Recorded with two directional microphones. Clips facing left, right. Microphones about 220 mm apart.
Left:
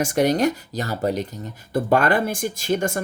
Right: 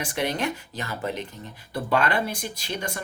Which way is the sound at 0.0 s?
45° left (ahead or behind).